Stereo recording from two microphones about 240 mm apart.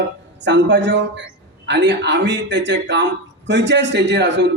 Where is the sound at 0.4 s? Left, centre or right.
Right.